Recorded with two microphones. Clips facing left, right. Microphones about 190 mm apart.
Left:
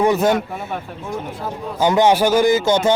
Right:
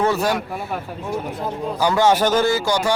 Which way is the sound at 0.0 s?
20° left (ahead or behind).